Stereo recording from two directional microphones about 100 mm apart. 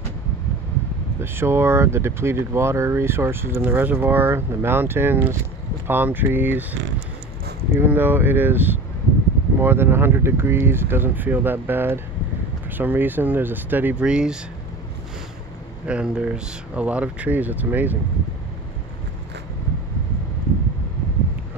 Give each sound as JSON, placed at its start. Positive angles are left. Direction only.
{"t": 1.2, "sound": "speech", "side_deg": -25}
{"t": 15.9, "sound": "speech", "side_deg": -10}